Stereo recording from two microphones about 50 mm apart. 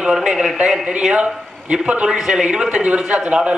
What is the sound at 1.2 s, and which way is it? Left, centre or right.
A man's voice, right.